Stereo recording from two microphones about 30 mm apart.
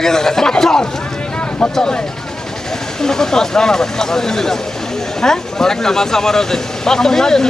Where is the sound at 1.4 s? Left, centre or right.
Left.